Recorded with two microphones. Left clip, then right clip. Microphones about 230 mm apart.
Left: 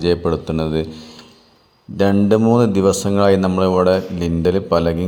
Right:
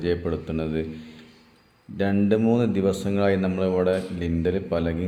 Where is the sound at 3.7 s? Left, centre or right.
Left.